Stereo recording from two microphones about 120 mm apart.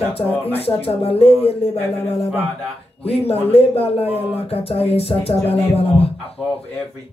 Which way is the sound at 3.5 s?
55° left (ahead or behind).